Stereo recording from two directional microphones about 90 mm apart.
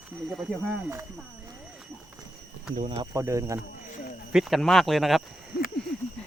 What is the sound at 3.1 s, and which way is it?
Speech, 35° right (ahead or behind).